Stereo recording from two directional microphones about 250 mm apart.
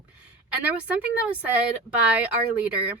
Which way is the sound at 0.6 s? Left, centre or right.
Centre.